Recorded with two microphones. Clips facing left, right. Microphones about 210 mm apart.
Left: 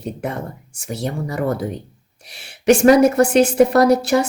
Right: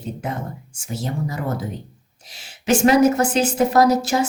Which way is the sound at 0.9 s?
65° left (ahead or behind).